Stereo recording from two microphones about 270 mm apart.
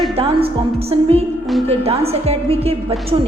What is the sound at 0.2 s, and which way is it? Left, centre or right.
A woman's voice, right.